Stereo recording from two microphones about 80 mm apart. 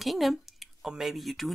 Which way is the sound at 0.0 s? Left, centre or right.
Centre.